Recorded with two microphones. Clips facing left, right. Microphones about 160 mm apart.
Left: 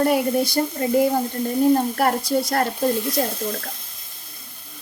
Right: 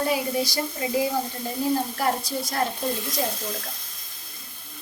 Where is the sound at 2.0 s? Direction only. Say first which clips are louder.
Left 6 dB; 65° left (ahead or behind).